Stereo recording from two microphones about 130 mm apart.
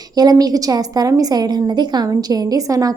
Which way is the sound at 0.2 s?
30° right (ahead or behind).